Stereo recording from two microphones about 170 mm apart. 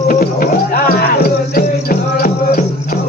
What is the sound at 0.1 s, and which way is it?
Music, 55° left (ahead or behind).